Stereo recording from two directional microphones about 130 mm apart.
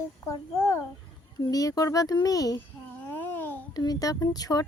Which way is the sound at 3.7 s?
30° left (ahead or behind).